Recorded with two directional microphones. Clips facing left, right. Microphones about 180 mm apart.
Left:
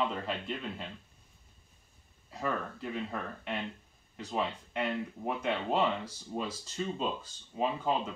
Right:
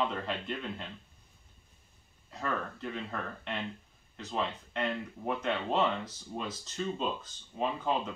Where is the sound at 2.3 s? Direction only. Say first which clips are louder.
Left 1 dB; 10° left (ahead or behind).